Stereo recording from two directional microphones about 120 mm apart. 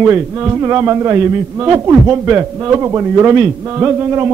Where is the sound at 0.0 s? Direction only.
20° right (ahead or behind).